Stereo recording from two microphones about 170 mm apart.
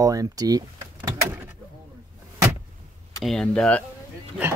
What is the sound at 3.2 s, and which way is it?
Speech, centre (ahead or behind).